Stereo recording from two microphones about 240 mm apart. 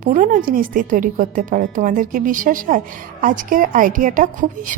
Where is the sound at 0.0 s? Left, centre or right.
Right.